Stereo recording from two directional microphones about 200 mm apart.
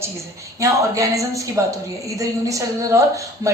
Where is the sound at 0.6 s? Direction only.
15° right (ahead or behind).